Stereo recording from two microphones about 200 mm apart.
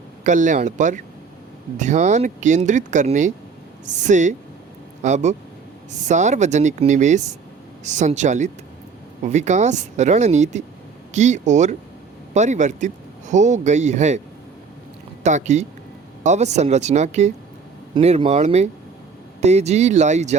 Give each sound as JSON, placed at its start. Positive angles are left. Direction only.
{"t": 0.3, "sound": "speech", "side_deg": -40}
{"t": 15.2, "sound": "speech", "side_deg": -35}